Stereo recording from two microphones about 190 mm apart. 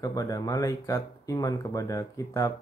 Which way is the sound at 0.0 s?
20° left (ahead or behind).